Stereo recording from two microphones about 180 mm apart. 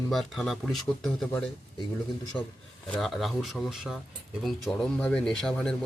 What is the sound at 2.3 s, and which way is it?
Speech, 25° left (ahead or behind).